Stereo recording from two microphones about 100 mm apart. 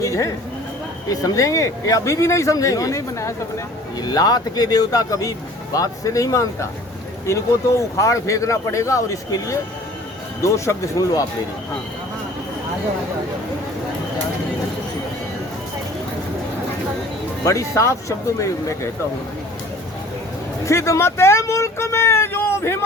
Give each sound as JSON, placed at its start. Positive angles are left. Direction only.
{"t": 0.0, "sound": "speech", "side_deg": 35}
{"t": 17.4, "sound": "speech", "side_deg": 35}
{"t": 20.7, "sound": "speech", "side_deg": 30}